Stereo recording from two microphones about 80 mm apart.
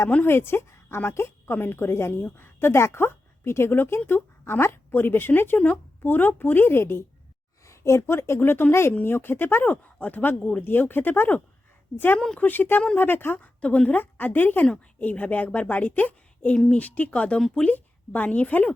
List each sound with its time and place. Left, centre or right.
0.1 s a woman's voice: left
13.6 s a woman's voice: centre
17.7 s a woman's voice: left